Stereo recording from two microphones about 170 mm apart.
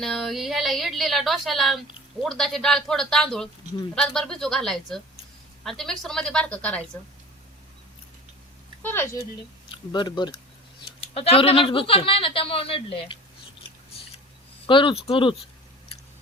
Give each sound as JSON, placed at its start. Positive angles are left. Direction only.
{"t": 0.0, "sound": "a woman's voice", "side_deg": 0}
{"t": 8.8, "sound": "speech", "side_deg": 15}
{"t": 9.6, "sound": "speech", "side_deg": 30}
{"t": 14.7, "sound": "speech", "side_deg": 30}